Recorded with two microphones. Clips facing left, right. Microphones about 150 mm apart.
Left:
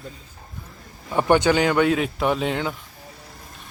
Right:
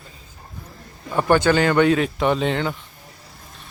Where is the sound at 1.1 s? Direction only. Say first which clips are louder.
Right 1 dB; 15° left (ahead or behind).